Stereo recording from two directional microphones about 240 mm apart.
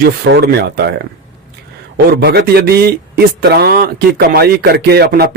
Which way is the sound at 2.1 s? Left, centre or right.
Right.